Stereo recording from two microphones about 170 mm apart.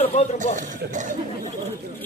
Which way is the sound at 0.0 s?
40° left (ahead or behind).